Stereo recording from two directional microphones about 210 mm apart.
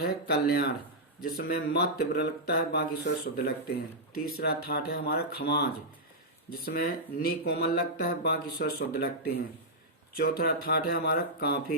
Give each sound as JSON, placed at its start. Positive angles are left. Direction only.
{"t": 0.0, "sound": "speech", "side_deg": 50}